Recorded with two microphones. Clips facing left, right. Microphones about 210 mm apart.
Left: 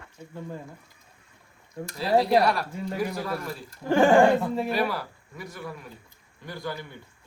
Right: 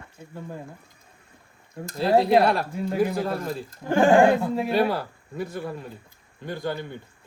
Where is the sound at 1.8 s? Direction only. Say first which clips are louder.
Right 3 dB; 50° right (ahead or behind).